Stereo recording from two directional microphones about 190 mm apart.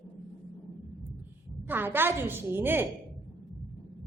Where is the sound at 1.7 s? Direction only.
10° right (ahead or behind).